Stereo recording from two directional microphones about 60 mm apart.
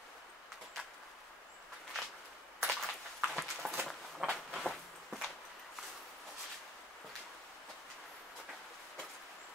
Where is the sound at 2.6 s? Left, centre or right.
Centre.